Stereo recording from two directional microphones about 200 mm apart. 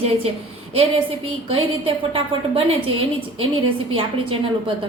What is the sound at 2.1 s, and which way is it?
Speech, 25° right (ahead or behind).